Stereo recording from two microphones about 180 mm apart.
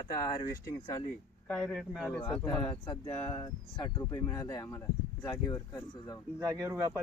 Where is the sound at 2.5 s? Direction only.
25° left (ahead or behind).